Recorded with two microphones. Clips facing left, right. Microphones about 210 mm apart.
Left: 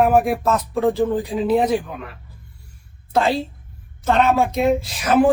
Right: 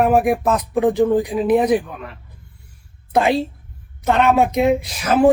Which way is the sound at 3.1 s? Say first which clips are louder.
Right 2 dB; 15° right (ahead or behind).